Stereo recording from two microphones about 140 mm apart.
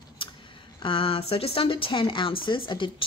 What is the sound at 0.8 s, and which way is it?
Speech, 40° left (ahead or behind).